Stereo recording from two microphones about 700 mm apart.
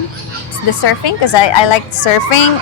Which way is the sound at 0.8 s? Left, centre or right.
Left.